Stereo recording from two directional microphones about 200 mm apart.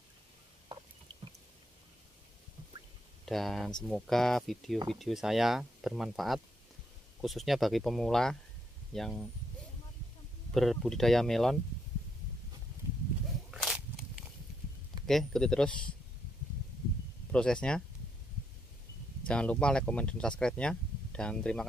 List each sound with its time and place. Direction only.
0.7 s squish: 25° right (ahead or behind)
3.3 s speech: centre (ahead or behind)
10.5 s speech: centre (ahead or behind)
13.5 s walk: centre (ahead or behind)
15.0 s speech: centre (ahead or behind)
17.3 s speech: 5° left (ahead or behind)
19.2 s speech: 5° left (ahead or behind)